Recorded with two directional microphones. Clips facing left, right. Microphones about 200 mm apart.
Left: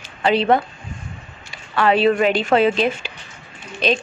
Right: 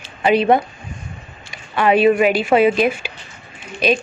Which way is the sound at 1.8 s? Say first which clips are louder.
Right 2 dB; 15° right (ahead or behind).